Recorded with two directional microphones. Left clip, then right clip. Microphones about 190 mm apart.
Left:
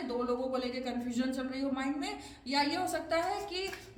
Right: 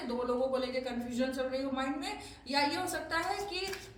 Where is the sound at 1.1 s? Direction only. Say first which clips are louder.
Right 6 dB; 40° left (ahead or behind).